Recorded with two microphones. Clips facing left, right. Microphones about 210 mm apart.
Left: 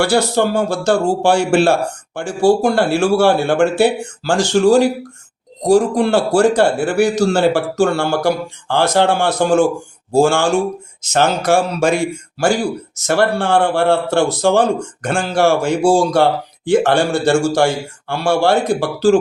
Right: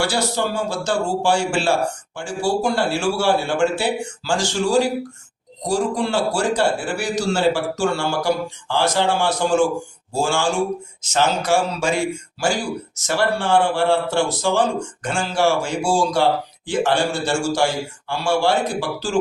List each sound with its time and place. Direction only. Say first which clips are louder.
0.0 s speech: left 7 dB; 60° left (ahead or behind)
13.1 s speech: left 4 dB; 55° left (ahead or behind)